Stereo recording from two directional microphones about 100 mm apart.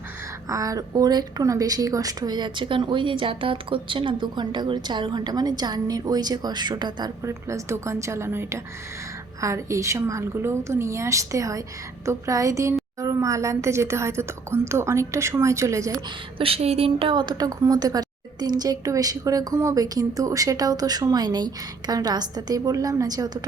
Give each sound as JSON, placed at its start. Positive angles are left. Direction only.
{"t": 0.4, "sound": "a woman's voice", "side_deg": -35}
{"t": 7.3, "sound": "a woman's voice", "side_deg": -30}
{"t": 16.4, "sound": "a woman's voice", "side_deg": -80}
{"t": 17.6, "sound": "a woman's voice", "side_deg": -40}